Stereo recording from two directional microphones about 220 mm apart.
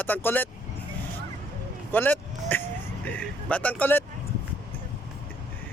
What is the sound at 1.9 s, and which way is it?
Speech, 10° left (ahead or behind).